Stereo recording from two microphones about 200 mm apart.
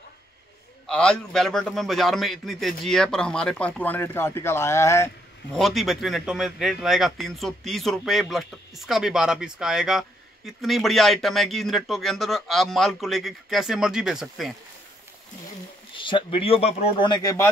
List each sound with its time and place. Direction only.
0.8 s speech: 5° left (ahead or behind)
5.5 s speech: centre (ahead or behind)
16.0 s speech: 25° left (ahead or behind)